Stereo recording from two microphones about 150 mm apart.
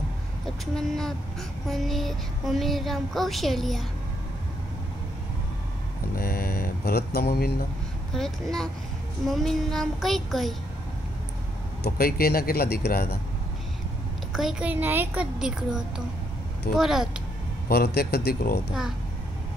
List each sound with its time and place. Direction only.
0.7 s speech: 5° left (ahead or behind)
6.1 s mantra: 80° left
8.1 s speech: centre (ahead or behind)
11.8 s speech: 90° left
14.3 s a woman's voice: 5° right (ahead or behind)
17.6 s speech: 90° left